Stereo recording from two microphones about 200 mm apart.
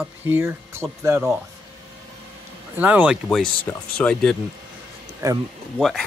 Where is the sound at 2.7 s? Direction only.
10° right (ahead or behind).